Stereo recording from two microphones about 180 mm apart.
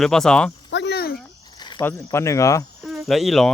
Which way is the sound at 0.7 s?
75° left (ahead or behind).